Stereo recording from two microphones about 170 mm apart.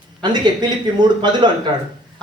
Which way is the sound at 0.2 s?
25° right (ahead or behind).